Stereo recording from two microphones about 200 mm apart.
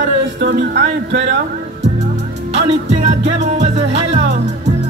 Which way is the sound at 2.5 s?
35° right (ahead or behind).